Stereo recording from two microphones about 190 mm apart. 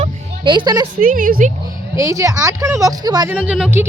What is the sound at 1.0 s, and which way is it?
Speech, 45° right (ahead or behind).